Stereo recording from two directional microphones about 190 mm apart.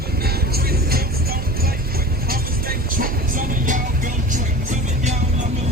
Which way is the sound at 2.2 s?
50° right (ahead or behind).